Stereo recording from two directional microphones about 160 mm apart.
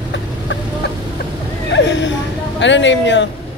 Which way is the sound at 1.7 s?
90° left.